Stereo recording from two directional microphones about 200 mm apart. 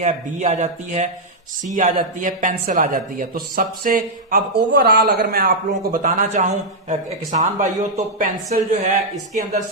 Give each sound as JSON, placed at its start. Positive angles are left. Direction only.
{"t": 0.0, "sound": "speech", "side_deg": -35}